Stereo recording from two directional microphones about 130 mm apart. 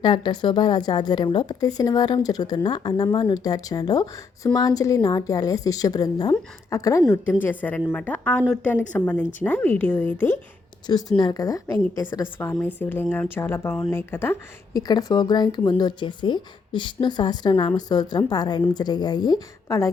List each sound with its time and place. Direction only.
0.0 s a woman's voice: 35° left (ahead or behind)
7.4 s a woman's voice: 10° left (ahead or behind)
11.2 s a woman's voice: 30° left (ahead or behind)
14.7 s a woman's voice: 30° left (ahead or behind)